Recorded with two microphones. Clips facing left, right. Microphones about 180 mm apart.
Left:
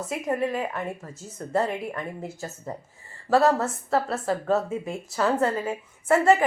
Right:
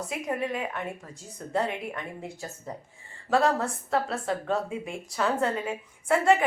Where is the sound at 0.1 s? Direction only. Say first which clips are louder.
Left 5 dB; centre (ahead or behind).